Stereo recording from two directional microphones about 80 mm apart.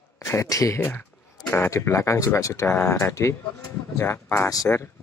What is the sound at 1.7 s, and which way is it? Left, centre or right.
Speech, left.